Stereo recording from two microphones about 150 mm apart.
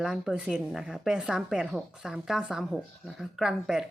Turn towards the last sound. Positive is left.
turn(degrees=-5)  # may be behind; listen again after turning